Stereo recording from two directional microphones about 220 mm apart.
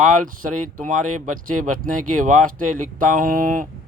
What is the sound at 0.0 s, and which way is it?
Speech, 35° right (ahead or behind).